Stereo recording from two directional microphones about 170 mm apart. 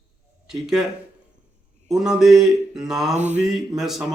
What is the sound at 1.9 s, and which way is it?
A man's voice, centre (ahead or behind).